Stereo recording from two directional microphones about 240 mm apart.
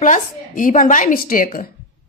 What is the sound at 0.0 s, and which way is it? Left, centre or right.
A woman's voice, left.